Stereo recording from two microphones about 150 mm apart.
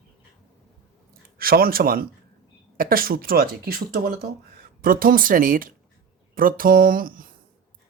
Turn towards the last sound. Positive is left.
turn(degrees=-70)  # may be behind; listen again after turning